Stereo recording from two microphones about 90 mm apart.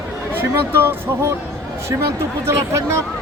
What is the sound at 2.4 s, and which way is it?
Speech, 30° right (ahead or behind).